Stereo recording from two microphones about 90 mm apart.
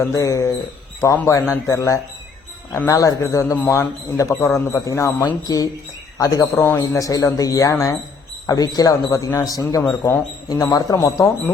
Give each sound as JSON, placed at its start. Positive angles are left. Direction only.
{"t": 0.0, "sound": "speech", "side_deg": 35}
{"t": 6.1, "sound": "speech", "side_deg": 40}
{"t": 6.6, "sound": "speech", "side_deg": 25}
{"t": 7.0, "sound": "speech", "side_deg": 40}
{"t": 10.0, "sound": "speech", "side_deg": 20}
{"t": 10.7, "sound": "speech", "side_deg": 45}